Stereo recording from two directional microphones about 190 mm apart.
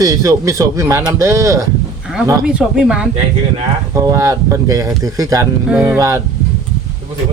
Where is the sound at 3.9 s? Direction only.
15° right (ahead or behind).